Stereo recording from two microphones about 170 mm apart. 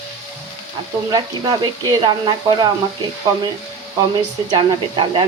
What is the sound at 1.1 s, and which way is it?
Speech, 25° right (ahead or behind).